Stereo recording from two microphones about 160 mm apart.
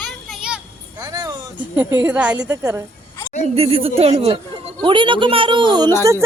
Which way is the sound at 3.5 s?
35° right (ahead or behind).